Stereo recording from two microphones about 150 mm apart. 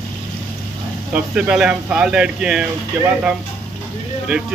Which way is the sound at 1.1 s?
5° right (ahead or behind).